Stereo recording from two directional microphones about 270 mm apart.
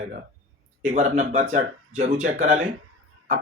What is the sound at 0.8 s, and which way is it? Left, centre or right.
Speech, right.